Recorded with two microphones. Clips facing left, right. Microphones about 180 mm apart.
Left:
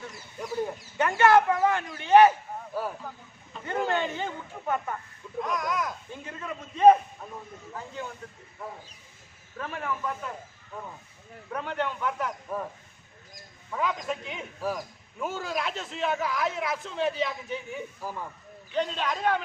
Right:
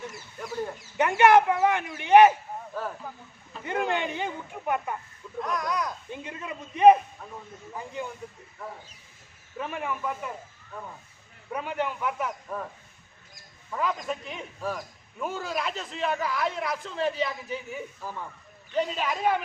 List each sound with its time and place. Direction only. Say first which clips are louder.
0.3 s fowl: left 2 dB; 10° left (ahead or behind)
0.9 s speech: right 2 dB; 15° right (ahead or behind)
2.8 s speech: left 2 dB; 10° left (ahead or behind)
3.6 s speech: even; 15° right (ahead or behind)
5.4 s a man's voice: even; centre (ahead or behind)
6.1 s speech: right 1 dB; 15° right (ahead or behind)
9.6 s speech: right 1 dB; 15° right (ahead or behind)
11.5 s speech: right 1 dB; 10° right (ahead or behind)
12.5 s a man's voice: left 2 dB; 5° left (ahead or behind)
13.7 s a man's voice: even; centre (ahead or behind)